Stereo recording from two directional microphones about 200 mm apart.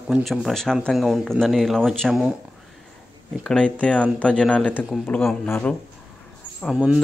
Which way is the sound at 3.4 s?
5° left (ahead or behind).